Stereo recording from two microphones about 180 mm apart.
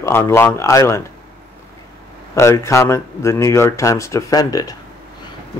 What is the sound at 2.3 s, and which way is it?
Speech, 15° left (ahead or behind).